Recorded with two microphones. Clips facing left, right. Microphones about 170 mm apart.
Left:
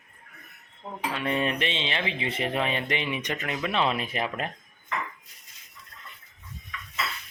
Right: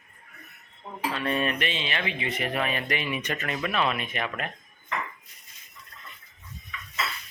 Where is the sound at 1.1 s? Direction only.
20° left (ahead or behind).